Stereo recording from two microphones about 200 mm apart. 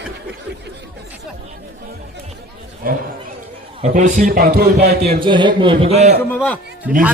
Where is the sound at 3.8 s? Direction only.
35° right (ahead or behind).